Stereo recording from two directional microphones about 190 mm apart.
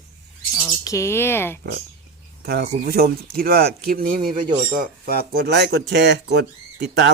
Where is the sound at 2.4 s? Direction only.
55° right (ahead or behind).